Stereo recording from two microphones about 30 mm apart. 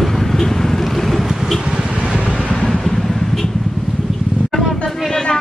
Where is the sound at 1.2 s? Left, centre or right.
Right.